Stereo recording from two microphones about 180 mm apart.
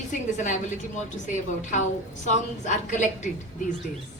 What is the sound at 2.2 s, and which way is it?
A woman's voice, 45° left (ahead or behind).